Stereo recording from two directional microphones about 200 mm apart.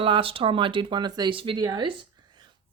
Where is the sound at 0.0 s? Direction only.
25° right (ahead or behind).